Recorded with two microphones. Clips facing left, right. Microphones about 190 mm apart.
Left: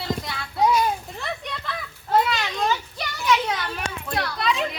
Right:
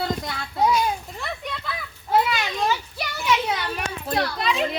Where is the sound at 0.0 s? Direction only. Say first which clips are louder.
Right 2 dB; 45° right (ahead or behind).